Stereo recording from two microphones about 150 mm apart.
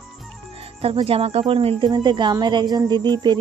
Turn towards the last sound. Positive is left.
turn(degrees=-30)  # may be behind; listen again after turning